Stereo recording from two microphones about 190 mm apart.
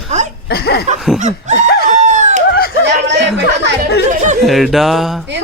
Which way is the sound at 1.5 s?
60° left (ahead or behind).